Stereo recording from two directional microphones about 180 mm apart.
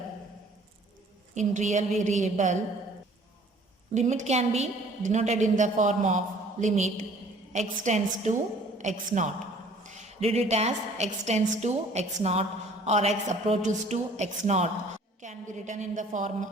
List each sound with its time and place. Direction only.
1.4 s a woman's voice: 40° right (ahead or behind)
3.9 s a woman's voice: 40° right (ahead or behind)